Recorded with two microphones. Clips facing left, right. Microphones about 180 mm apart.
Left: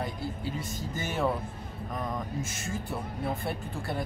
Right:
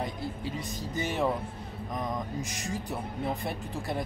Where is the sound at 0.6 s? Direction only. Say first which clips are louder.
Right 1 dB; 15° right (ahead or behind).